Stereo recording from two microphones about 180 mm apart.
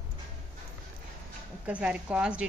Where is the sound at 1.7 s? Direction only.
5° right (ahead or behind).